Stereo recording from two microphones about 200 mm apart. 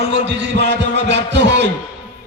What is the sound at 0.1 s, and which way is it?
Music, 60° right (ahead or behind).